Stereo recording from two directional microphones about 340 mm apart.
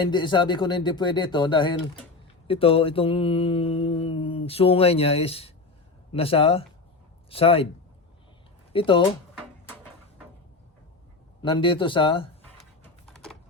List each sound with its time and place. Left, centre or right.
0.0 s mantra: centre
7.3 s speech: centre
8.7 s speech: centre
11.4 s mantra: centre
12.8 s typing: centre